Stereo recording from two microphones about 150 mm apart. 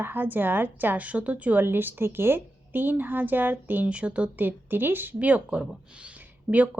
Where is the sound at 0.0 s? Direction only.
15° right (ahead or behind).